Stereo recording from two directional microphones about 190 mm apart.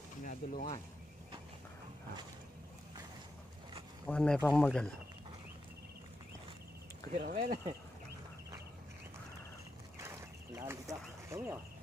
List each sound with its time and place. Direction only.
0.2 s speech: 45° left (ahead or behind)
4.0 s speech: 5° left (ahead or behind)
7.1 s speech: 40° right (ahead or behind)
9.9 s a sound: 15° right (ahead or behind)